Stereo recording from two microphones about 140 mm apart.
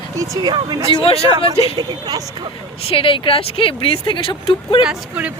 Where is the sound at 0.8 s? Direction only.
40° left (ahead or behind).